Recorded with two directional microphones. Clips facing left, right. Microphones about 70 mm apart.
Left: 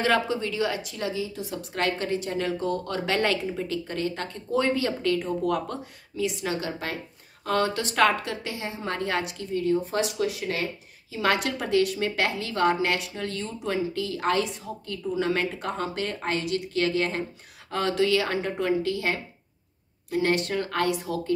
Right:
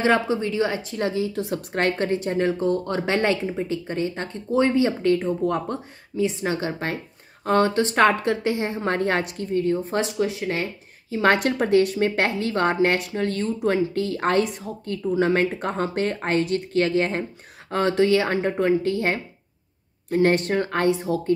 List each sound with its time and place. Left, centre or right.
0.0 s a woman's voice: right